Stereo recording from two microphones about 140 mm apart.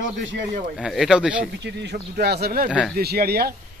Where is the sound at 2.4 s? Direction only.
90° right.